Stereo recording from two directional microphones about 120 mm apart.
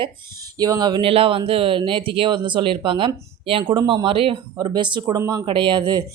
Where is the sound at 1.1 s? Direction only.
50° right (ahead or behind).